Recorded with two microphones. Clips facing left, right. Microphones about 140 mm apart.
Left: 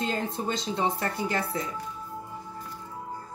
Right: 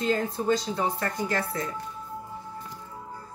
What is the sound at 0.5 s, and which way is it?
Speech, 25° left (ahead or behind).